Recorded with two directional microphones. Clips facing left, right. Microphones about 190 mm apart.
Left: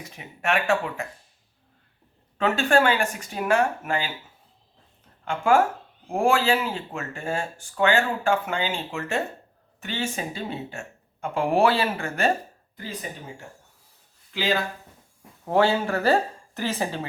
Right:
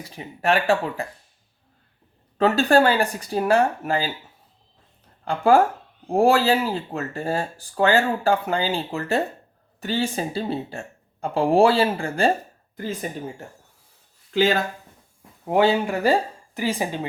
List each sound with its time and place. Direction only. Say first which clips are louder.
0.0 s speech: right 5 dB; 35° right (ahead or behind)
2.4 s speech: right 4 dB; 35° right (ahead or behind)
5.2 s speech: right 3 dB; 35° right (ahead or behind)
12.7 s speech: right 7 dB; 50° right (ahead or behind)
14.3 s speech: right 6 dB; 45° right (ahead or behind)
15.4 s a woman's voice: right 2 dB; 15° right (ahead or behind)